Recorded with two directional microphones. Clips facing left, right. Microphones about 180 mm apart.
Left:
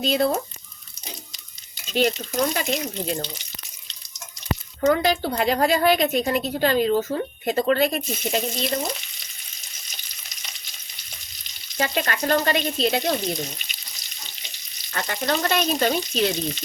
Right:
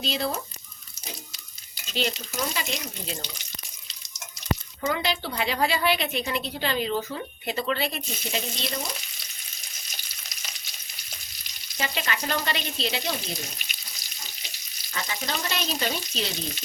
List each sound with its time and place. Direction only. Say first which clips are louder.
0.0 s a woman's voice: left 8 dB; 50° left (ahead or behind)
2.0 s a woman's voice: left 8 dB; 45° left (ahead or behind)
4.8 s a woman's voice: left 10 dB; 45° left (ahead or behind)
11.8 s a woman's voice: left 6 dB; 50° left (ahead or behind)
14.9 s a woman's voice: left 7 dB; 60° left (ahead or behind)